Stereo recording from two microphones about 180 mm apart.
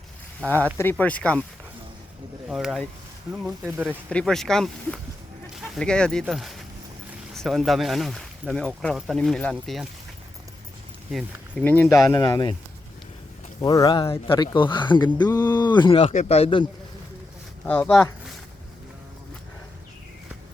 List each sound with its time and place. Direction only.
0.4 s speech: 10° left (ahead or behind)
2.5 s speech: centre (ahead or behind)
4.1 s speech: 5° left (ahead or behind)
11.5 s speech: 10° left (ahead or behind)
13.6 s speech: 20° left (ahead or behind)
17.7 s speech: 5° left (ahead or behind)